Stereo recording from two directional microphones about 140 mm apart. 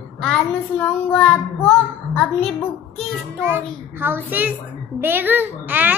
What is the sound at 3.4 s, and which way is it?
A child's voice, 15° right (ahead or behind).